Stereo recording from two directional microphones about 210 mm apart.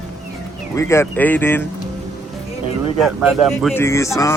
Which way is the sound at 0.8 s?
10° left (ahead or behind).